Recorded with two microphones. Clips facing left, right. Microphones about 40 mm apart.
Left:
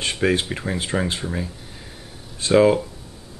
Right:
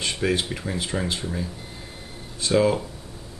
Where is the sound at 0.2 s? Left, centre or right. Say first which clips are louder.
Left 5 dB; left.